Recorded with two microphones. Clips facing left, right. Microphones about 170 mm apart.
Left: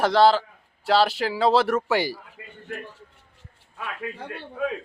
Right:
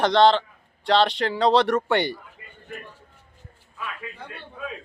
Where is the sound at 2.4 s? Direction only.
70° left (ahead or behind).